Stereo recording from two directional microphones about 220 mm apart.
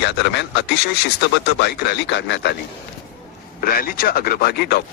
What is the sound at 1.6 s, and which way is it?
Speech, 50° left (ahead or behind).